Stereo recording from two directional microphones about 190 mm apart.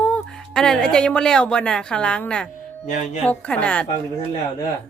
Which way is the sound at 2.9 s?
40° left (ahead or behind).